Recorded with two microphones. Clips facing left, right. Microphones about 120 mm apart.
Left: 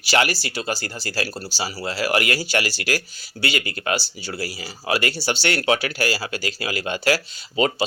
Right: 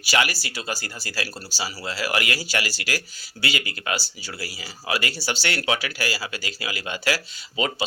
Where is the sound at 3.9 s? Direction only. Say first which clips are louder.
Left 4 dB; 25° left (ahead or behind).